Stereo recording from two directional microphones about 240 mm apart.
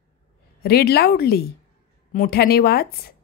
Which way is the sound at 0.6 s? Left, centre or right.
Left.